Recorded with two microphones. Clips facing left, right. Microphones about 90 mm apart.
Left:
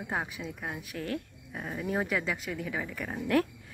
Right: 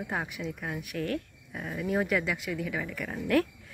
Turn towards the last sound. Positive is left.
turn(degrees=25)  # may be behind; listen again after turning